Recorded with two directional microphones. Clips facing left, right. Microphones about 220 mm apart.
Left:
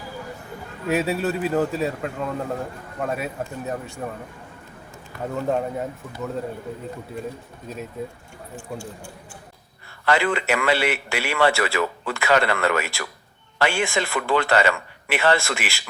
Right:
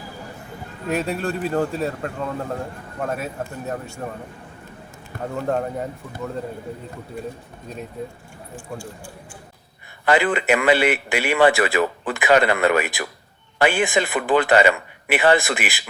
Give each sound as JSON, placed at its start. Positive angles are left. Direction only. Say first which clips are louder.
{"t": 0.9, "sound": "a man's voice", "louder": "left 1 dB", "side_deg": 5}
{"t": 5.2, "sound": "a man's voice", "louder": "even", "side_deg": 0}
{"t": 10.1, "sound": "a man's voice", "louder": "right 3 dB", "side_deg": -15}